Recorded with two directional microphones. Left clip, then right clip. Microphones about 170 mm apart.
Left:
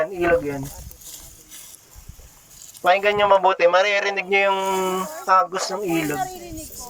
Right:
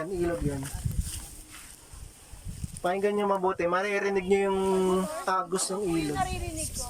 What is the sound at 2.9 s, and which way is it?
A man's voice, 40° left (ahead or behind).